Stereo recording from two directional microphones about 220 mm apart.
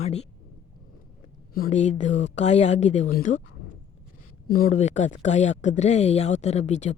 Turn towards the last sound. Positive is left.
turn(degrees=30)  # may be behind; listen again after turning